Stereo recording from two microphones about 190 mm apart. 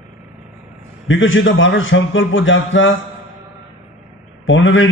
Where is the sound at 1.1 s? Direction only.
90° left.